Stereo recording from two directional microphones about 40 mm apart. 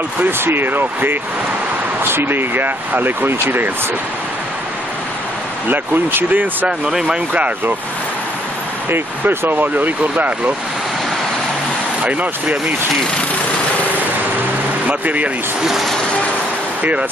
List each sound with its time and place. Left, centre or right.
0.4 s speech: right
2.1 s speech: right
5.7 s speech: right
6.9 s speech: centre
8.9 s speech: right
12.0 s speech: right
14.9 s speech: right
15.6 s speech: centre